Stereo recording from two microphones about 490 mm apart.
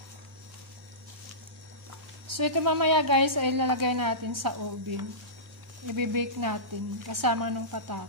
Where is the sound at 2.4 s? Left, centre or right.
Right.